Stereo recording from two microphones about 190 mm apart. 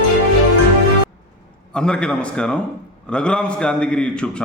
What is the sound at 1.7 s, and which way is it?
A man's voice, 5° left (ahead or behind).